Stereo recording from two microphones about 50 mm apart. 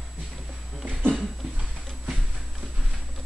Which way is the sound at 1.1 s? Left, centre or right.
Centre.